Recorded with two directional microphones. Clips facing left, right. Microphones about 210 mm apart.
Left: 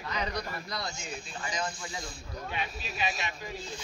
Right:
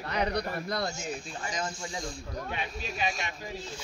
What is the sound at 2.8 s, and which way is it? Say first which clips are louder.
Speech: right 3 dB; 50° right (ahead or behind).